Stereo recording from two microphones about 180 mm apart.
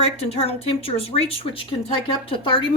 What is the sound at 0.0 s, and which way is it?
A woman's voice, 35° left (ahead or behind).